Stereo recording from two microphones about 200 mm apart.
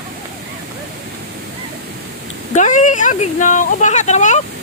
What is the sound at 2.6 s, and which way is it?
Speech, 40° left (ahead or behind).